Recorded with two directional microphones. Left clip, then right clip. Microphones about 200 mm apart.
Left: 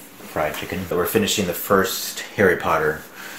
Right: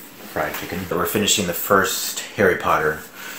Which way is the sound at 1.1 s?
20° left (ahead or behind).